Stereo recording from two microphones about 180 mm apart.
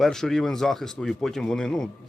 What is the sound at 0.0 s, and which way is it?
Speech, centre (ahead or behind).